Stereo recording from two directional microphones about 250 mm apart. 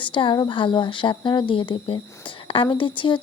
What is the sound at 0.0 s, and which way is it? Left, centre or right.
Speech, centre.